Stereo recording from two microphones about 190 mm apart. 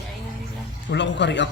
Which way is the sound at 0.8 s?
70° left (ahead or behind).